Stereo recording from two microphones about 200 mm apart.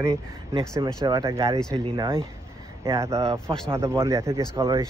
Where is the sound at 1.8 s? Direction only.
25° right (ahead or behind).